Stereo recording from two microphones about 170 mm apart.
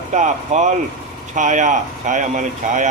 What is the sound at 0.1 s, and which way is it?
Speech, 45° right (ahead or behind).